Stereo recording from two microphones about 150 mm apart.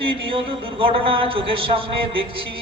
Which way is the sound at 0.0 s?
35° right (ahead or behind).